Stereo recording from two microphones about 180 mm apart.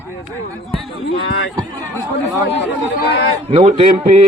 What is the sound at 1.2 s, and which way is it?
Speech, 65° left (ahead or behind).